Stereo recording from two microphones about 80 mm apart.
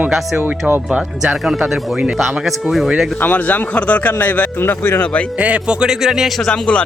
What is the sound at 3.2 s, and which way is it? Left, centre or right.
Speech, left.